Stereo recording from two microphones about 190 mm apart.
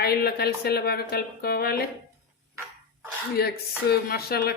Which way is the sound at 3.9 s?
55° left (ahead or behind).